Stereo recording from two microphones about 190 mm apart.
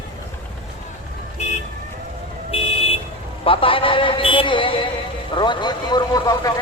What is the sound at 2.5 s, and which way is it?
Vehicle, 30° left (ahead or behind).